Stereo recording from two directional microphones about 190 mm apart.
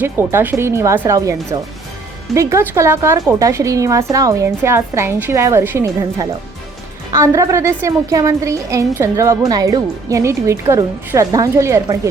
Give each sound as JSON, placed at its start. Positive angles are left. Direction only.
{"t": 0.0, "sound": "a woman's voice", "side_deg": -10}